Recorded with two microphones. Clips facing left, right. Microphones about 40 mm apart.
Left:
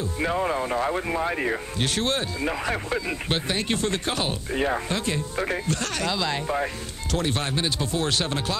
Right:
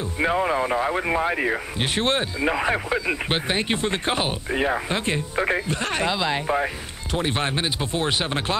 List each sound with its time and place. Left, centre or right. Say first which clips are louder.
0.0 s speech: right 3 dB; right